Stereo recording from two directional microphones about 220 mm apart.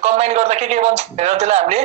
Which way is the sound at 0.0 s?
30° right (ahead or behind).